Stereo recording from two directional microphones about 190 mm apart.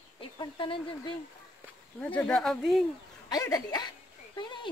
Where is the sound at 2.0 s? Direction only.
5° left (ahead or behind).